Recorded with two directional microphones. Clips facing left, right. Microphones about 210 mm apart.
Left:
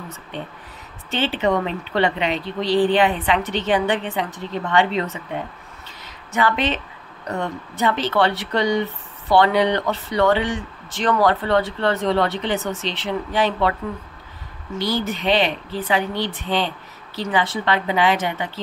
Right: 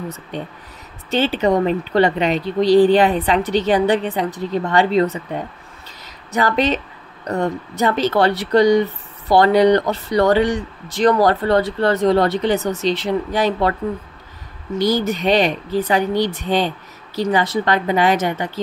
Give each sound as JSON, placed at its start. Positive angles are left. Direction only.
{"t": 0.3, "sound": "speech", "side_deg": -40}
{"t": 6.3, "sound": "speech", "side_deg": -40}
{"t": 14.8, "sound": "speech", "side_deg": -40}